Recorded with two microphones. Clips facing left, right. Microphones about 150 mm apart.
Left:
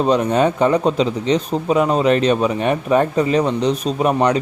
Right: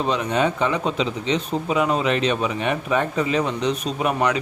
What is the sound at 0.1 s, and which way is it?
A man's voice, 45° left (ahead or behind).